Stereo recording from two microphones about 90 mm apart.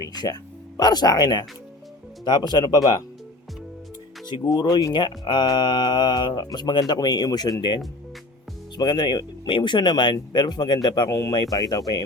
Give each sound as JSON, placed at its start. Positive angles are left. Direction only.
{"t": 0.8, "sound": "speech", "side_deg": 50}
{"t": 4.3, "sound": "speech", "side_deg": 50}
{"t": 8.8, "sound": "speech", "side_deg": 55}
{"t": 9.5, "sound": "speech", "side_deg": 65}
{"t": 11.1, "sound": "speech", "side_deg": 35}